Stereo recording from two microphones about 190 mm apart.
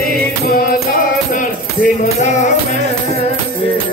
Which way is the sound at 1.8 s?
40° left (ahead or behind).